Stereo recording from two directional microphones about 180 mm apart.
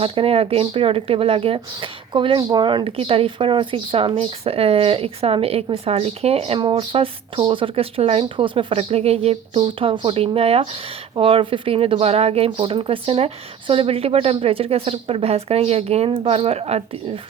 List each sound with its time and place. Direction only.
0.0 s speech: 30° right (ahead or behind)